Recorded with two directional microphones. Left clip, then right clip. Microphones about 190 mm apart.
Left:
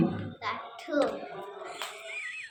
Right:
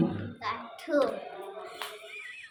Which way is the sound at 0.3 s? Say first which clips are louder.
Even; 15° right (ahead or behind).